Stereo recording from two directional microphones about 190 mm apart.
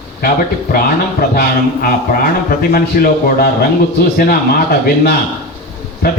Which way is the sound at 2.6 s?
50° left (ahead or behind).